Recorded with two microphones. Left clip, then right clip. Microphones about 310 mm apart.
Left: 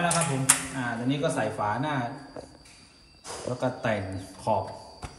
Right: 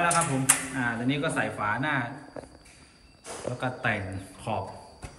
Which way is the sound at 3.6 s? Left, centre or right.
Centre.